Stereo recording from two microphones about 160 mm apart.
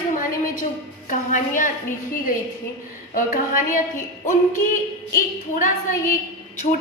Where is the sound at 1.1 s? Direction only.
55° left (ahead or behind).